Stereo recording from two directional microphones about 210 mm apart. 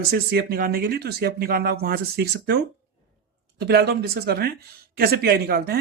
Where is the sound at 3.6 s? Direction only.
50° right (ahead or behind).